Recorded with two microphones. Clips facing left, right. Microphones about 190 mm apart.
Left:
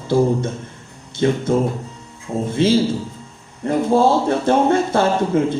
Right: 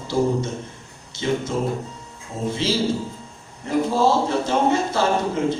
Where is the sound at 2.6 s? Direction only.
55° left (ahead or behind).